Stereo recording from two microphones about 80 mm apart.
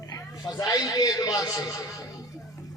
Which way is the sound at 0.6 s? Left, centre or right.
Left.